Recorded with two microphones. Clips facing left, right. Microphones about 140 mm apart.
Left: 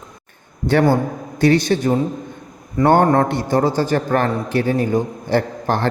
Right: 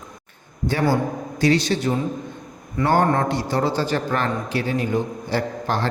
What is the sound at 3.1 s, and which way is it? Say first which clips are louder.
A man's voice: left 5 dB; 50° left (ahead or behind).